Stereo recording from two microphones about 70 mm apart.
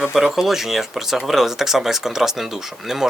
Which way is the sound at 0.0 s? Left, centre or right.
Centre.